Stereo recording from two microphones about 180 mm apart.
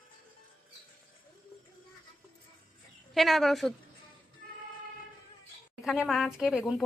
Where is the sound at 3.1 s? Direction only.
Centre (ahead or behind).